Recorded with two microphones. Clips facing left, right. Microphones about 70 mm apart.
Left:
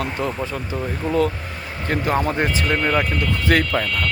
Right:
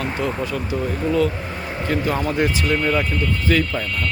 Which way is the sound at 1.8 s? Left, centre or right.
Left.